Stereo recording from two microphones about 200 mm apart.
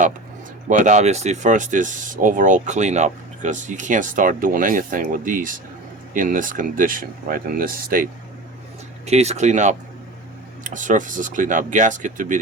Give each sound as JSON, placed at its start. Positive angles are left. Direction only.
{"t": 0.7, "sound": "speech", "side_deg": -35}
{"t": 9.0, "sound": "speech", "side_deg": -35}